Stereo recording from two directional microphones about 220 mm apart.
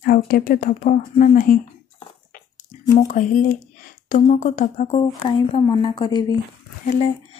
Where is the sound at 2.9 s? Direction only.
35° left (ahead or behind).